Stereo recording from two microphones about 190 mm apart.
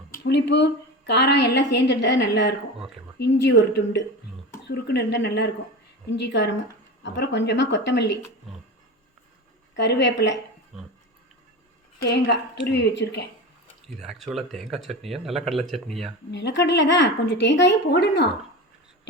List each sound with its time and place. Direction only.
0.1 s a woman's voice: 65° left (ahead or behind)
9.7 s speech: 65° left (ahead or behind)
10.7 s speech: 5° right (ahead or behind)
12.0 s a woman's voice: 65° left (ahead or behind)
14.0 s speech: centre (ahead or behind)
16.3 s speech: 70° left (ahead or behind)